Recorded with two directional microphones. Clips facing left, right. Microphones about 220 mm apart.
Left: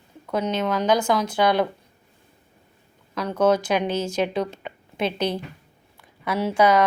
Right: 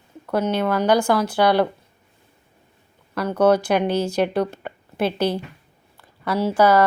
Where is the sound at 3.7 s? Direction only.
55° right (ahead or behind).